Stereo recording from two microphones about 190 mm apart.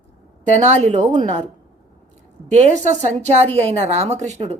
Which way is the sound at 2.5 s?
35° right (ahead or behind).